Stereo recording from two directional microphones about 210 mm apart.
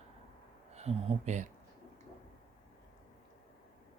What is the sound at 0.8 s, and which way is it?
Speech, 30° right (ahead or behind).